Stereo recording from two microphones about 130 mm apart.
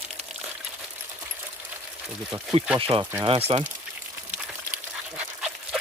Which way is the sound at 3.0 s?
25° right (ahead or behind).